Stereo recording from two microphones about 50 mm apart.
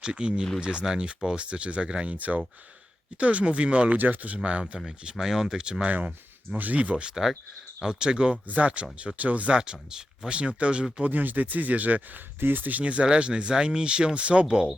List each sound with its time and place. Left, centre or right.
0.0 s speech: centre
2.1 s speech: right
4.9 s speech: centre
5.9 s speech: right
7.1 s speech: centre
8.4 s speech: right
9.6 s speech: centre
11.0 s speech: right; by 14.7 s centre